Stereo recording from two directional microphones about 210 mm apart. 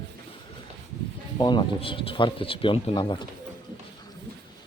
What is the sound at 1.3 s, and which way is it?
Speech, 20° left (ahead or behind).